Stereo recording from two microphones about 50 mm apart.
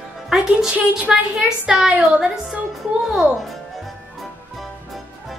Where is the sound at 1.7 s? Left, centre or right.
Centre.